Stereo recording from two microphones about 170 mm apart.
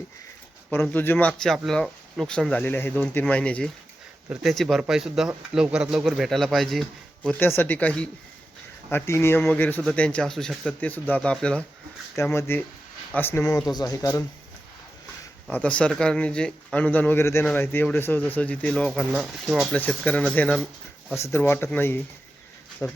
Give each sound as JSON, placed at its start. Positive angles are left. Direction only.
{"t": 0.9, "sound": "speech", "side_deg": 10}
{"t": 7.3, "sound": "speech", "side_deg": 15}
{"t": 15.4, "sound": "speech", "side_deg": 10}
{"t": 19.7, "sound": "speech", "side_deg": 10}